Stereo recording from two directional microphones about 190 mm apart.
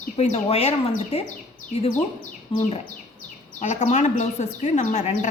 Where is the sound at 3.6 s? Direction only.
40° left (ahead or behind).